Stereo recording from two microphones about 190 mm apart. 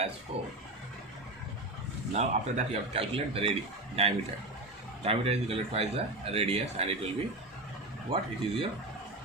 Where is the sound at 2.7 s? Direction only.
30° right (ahead or behind).